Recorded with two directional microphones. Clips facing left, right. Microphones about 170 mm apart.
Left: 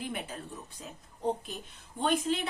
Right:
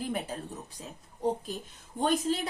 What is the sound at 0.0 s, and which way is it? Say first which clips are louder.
Speech: right 4 dB; 40° right (ahead or behind).